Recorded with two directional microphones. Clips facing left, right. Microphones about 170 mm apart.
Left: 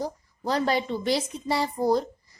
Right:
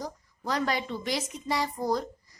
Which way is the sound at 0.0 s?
30° left (ahead or behind).